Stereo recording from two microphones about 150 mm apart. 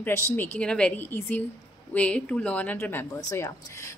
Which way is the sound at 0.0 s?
15° left (ahead or behind).